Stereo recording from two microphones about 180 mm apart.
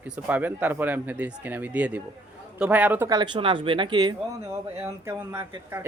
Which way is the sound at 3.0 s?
25° right (ahead or behind).